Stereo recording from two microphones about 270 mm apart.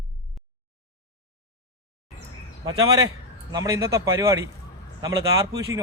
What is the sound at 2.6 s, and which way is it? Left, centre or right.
Speech, centre.